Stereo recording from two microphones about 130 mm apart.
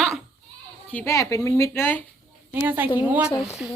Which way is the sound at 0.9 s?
10° left (ahead or behind).